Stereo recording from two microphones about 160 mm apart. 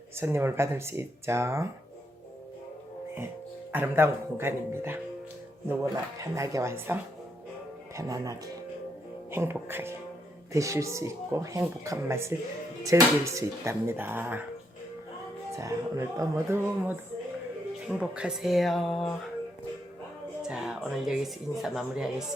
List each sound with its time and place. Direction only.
0.2 s speech: 15° right (ahead or behind)
3.7 s speech: 15° right (ahead or behind)
15.5 s speech: 20° right (ahead or behind); by 19.0 s centre (ahead or behind)
20.5 s speech: 5° right (ahead or behind)